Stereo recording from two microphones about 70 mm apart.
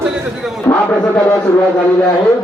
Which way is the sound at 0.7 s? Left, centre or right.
Left.